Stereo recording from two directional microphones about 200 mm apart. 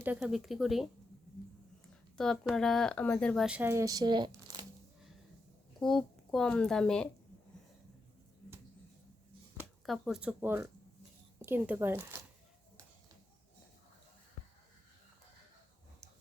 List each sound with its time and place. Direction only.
0.2 s speech: centre (ahead or behind)
2.1 s speech: 5° left (ahead or behind); by 4.3 s 20° right (ahead or behind)
4.5 s coin: 20° right (ahead or behind)
5.8 s speech: centre (ahead or behind)
9.6 s a woman's voice: centre (ahead or behind)